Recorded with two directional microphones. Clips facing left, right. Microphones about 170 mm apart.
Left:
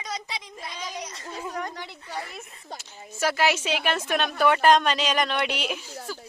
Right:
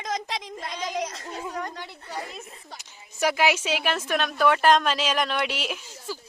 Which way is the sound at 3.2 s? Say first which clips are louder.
Right 1 dB; 10° right (ahead or behind).